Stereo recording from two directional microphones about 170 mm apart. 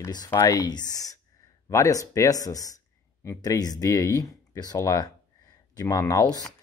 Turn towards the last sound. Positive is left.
turn(degrees=20)  # may be behind; listen again after turning